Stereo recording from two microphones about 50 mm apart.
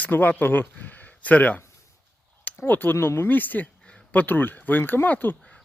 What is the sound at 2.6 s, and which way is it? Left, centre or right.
Speech, left.